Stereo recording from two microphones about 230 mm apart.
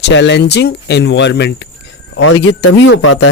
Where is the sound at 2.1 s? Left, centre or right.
Left.